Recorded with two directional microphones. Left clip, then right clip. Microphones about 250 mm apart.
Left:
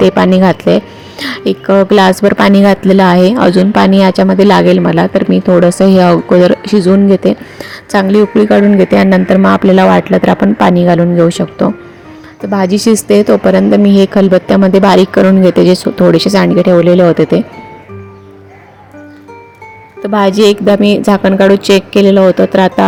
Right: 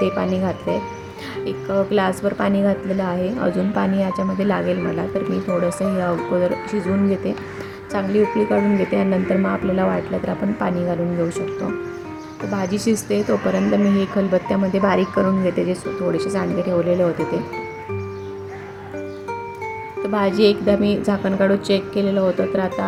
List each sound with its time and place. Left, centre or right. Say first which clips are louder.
0.0 s speech: left 13 dB; left
20.0 s speech: left 9 dB; left